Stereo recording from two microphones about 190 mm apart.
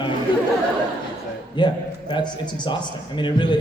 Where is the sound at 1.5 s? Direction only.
25° left (ahead or behind).